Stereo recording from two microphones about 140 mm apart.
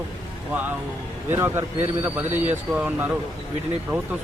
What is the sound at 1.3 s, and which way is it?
Speech, 15° right (ahead or behind).